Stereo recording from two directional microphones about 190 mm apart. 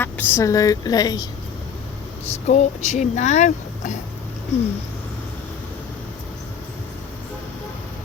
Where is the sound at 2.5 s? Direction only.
40° left (ahead or behind).